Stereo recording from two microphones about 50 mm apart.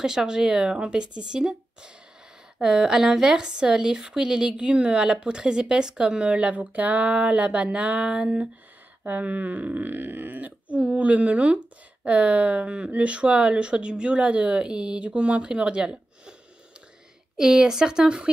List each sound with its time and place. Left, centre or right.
0.0 s speech: centre
17.4 s speech: centre